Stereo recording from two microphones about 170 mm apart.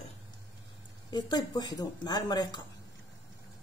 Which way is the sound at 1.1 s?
25° left (ahead or behind).